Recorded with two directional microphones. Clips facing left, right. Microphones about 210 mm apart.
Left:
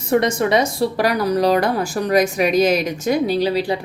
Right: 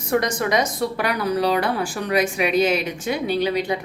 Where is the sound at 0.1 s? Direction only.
25° left (ahead or behind).